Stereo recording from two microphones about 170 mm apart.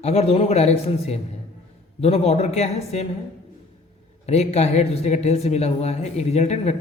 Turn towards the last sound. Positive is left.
turn(degrees=40)  # may be behind; listen again after turning